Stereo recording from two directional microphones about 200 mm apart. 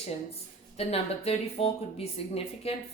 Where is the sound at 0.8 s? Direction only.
30° left (ahead or behind).